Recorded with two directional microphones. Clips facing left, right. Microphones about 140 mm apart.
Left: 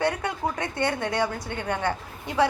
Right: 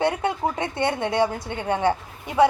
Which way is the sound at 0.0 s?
25° right (ahead or behind).